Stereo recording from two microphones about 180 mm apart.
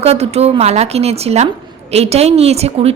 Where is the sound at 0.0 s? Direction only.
35° right (ahead or behind).